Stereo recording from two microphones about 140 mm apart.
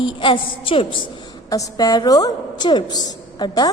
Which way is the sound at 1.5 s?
25° left (ahead or behind).